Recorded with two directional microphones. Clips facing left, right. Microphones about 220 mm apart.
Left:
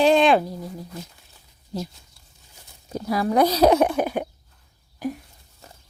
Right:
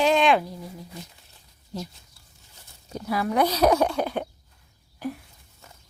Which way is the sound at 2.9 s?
35° left (ahead or behind).